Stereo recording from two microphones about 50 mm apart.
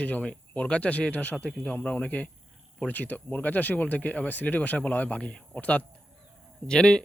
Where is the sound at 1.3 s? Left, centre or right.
Centre.